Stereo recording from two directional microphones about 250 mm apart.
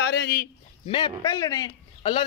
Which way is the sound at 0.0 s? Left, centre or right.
Left.